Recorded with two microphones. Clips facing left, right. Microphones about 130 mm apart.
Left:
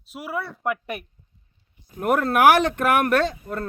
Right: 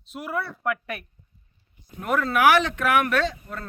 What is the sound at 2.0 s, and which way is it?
Speech, 55° left (ahead or behind).